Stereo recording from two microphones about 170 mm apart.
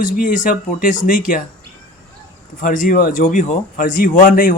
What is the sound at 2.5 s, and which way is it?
Speech, 50° left (ahead or behind).